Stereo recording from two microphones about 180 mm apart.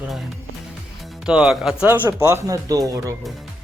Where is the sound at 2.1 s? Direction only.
15° right (ahead or behind).